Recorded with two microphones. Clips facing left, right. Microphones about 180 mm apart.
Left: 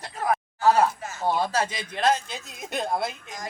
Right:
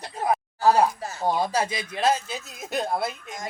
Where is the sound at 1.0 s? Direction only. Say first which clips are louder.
Right 2 dB; 35° right (ahead or behind).